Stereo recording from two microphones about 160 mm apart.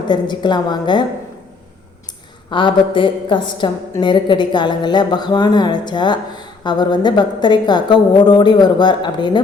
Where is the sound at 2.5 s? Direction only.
30° left (ahead or behind).